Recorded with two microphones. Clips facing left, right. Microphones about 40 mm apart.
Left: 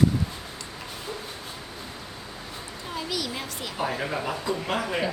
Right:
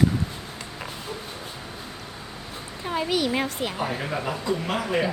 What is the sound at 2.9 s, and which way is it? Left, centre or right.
Speech, right.